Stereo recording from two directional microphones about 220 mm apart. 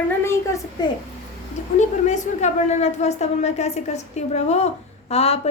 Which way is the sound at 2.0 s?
30° left (ahead or behind).